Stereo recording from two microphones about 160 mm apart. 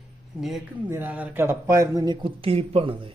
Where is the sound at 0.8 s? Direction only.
10° right (ahead or behind); by 3.1 s 30° right (ahead or behind).